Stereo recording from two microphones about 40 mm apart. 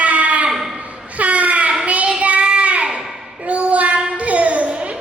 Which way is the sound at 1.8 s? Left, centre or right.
Right.